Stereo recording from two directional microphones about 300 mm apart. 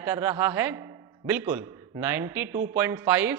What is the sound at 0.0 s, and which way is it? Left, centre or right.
A man's voice, centre.